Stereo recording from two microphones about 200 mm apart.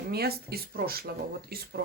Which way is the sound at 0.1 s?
50° right (ahead or behind).